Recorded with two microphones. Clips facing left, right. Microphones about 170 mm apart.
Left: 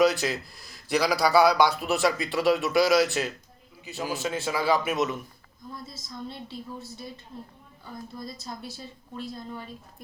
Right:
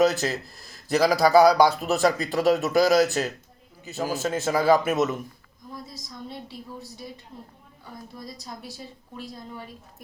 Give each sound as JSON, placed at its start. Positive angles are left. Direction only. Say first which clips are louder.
{"t": 0.0, "sound": "a man's voice", "louder": "right 1 dB", "side_deg": -45}
{"t": 5.7, "sound": "a woman's voice", "louder": "right 1 dB", "side_deg": -15}